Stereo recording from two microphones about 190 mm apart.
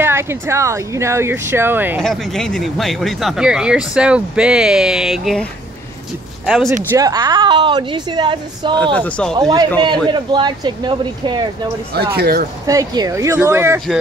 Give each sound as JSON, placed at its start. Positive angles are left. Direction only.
{"t": 0.0, "sound": "speech", "side_deg": -15}
{"t": 2.0, "sound": "speech", "side_deg": 0}
{"t": 6.9, "sound": "a woman's voice", "side_deg": -20}
{"t": 8.9, "sound": "speech", "side_deg": 5}
{"t": 9.4, "sound": "a woman's voice", "side_deg": -20}
{"t": 12.2, "sound": "speech", "side_deg": -55}
{"t": 12.6, "sound": "speech", "side_deg": -20}